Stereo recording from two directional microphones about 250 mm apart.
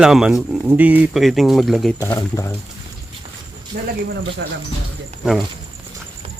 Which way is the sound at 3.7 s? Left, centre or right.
Right.